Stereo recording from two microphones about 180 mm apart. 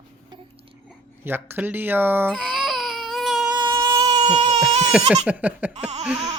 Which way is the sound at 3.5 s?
25° right (ahead or behind).